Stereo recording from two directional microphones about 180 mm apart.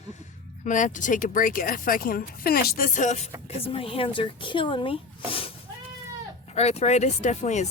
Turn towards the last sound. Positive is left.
turn(degrees=40)  # may be behind; listen again after turning